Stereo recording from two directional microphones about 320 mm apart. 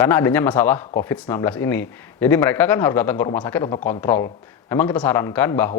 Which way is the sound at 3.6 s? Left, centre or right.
Centre.